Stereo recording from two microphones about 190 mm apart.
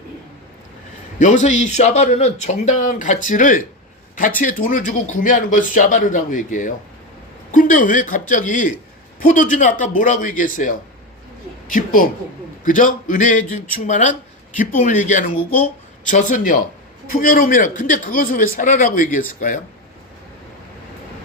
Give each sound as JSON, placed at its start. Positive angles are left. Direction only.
{"t": 1.2, "sound": "a man's voice", "side_deg": 40}